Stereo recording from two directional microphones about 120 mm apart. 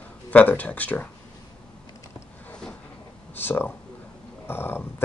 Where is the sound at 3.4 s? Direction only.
15° left (ahead or behind).